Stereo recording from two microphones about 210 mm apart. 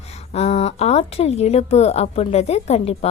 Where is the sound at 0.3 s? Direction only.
30° left (ahead or behind).